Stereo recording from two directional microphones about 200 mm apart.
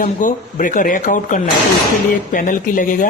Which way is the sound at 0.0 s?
40° left (ahead or behind).